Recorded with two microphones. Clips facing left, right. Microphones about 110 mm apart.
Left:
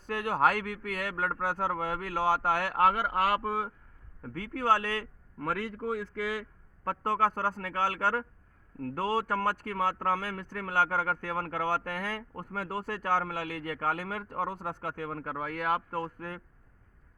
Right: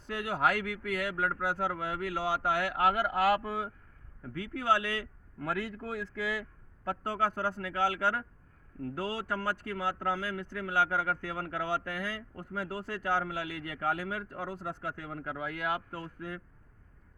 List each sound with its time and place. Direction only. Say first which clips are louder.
0.1 s speech: left 3 dB; 45° left (ahead or behind)
7.0 s speech: left 4 dB; 50° left (ahead or behind)